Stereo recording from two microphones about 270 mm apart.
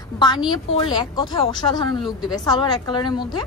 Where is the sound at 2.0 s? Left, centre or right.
Centre.